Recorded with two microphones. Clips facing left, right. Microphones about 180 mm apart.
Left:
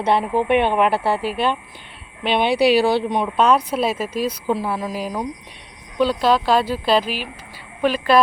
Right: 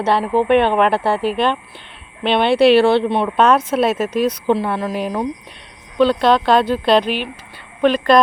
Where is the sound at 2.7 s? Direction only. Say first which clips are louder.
Right 6 dB; 60° right (ahead or behind).